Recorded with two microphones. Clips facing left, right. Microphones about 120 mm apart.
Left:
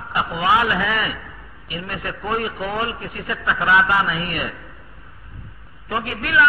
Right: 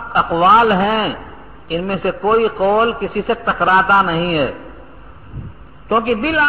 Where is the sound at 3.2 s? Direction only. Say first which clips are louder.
Right 5 dB; 40° right (ahead or behind).